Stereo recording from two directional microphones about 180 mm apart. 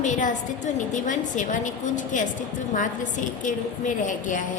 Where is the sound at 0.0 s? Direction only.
45° left (ahead or behind).